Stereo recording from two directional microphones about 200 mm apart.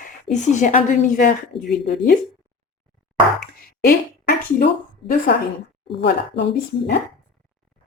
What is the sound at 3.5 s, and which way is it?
A woman's voice, 45° left (ahead or behind).